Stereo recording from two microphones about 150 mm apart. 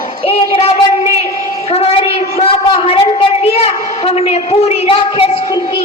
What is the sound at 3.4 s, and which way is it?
A woman's voice, 45° left (ahead or behind).